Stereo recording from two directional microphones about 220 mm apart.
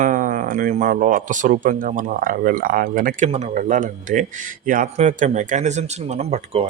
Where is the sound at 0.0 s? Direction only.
35° right (ahead or behind).